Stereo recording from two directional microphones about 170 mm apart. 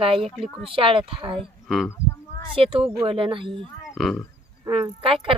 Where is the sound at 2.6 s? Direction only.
30° right (ahead or behind).